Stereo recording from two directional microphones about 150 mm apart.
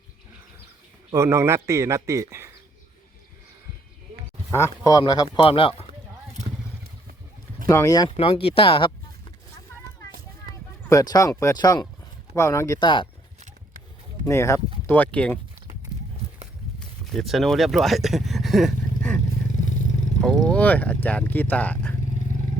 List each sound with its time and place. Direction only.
1.1 s a man's voice: 20° right (ahead or behind)
4.5 s speech: 20° left (ahead or behind); by 5.7 s 35° left (ahead or behind)
7.7 s speech: 20° left (ahead or behind)
8.1 s speech: 40° left (ahead or behind)
10.8 s speech: 25° left (ahead or behind)
12.8 s speech: 30° left (ahead or behind)
14.3 s speech: 20° left (ahead or behind)
17.1 s speech: centre (ahead or behind)
20.2 s speech: centre (ahead or behind)